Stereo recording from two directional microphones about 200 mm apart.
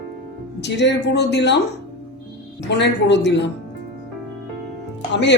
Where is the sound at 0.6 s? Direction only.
60° left (ahead or behind).